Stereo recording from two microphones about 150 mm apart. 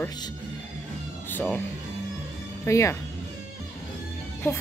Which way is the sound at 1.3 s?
10° left (ahead or behind).